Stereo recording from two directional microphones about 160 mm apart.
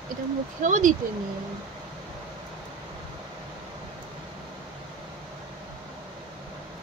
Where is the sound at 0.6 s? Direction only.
55° right (ahead or behind).